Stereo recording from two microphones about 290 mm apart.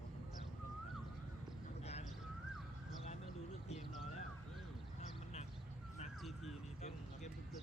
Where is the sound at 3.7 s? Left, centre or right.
Left.